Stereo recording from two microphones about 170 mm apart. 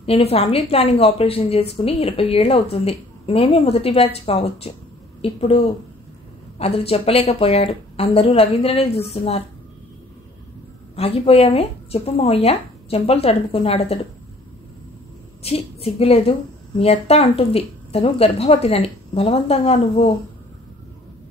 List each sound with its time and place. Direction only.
0.0 s a woman's voice: 35° left (ahead or behind)
6.6 s a woman's voice: 35° left (ahead or behind)
11.0 s a woman's voice: 35° left (ahead or behind)
15.4 s a woman's voice: 35° left (ahead or behind)